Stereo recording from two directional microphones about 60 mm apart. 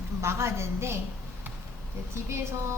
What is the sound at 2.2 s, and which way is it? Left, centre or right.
Speech, right.